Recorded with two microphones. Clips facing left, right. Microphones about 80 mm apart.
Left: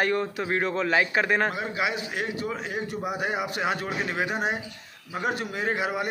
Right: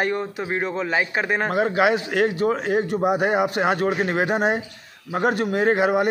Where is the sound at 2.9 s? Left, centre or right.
Right.